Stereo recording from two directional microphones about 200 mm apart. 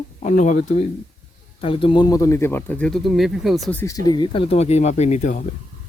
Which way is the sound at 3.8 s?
15° left (ahead or behind).